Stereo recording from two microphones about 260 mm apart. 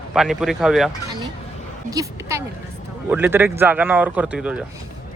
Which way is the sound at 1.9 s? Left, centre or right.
Centre.